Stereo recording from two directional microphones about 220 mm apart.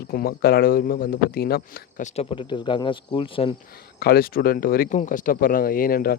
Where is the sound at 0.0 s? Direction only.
45° left (ahead or behind); by 3.5 s 25° left (ahead or behind).